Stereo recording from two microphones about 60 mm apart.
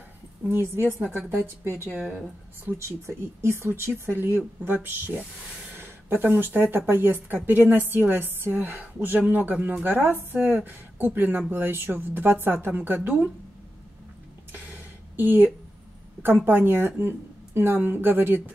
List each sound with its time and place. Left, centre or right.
0.5 s speech: right
14.5 s a sound: right
16.2 s speech: right